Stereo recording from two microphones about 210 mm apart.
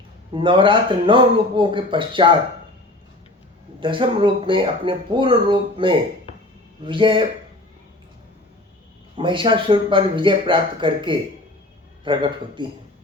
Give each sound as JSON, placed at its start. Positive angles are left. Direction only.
{"t": 0.3, "sound": "speech", "side_deg": -25}
{"t": 3.8, "sound": "speech", "side_deg": -25}
{"t": 9.1, "sound": "speech", "side_deg": -25}